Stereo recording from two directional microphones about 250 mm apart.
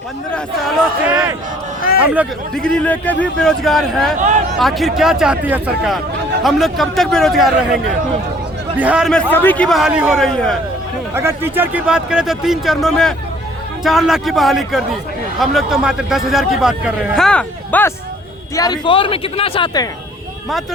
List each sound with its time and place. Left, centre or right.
1.0 s a man's voice: centre
4.2 s speech: right
4.6 s a man's voice: centre
8.8 s a man's voice: centre
11.1 s a man's voice: centre